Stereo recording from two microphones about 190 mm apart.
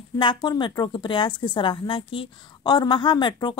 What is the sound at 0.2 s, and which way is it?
A woman's voice, 25° left (ahead or behind).